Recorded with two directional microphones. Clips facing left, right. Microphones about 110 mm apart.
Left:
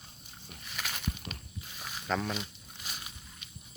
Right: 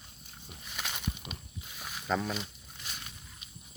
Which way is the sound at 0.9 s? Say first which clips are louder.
Even; 10° right (ahead or behind).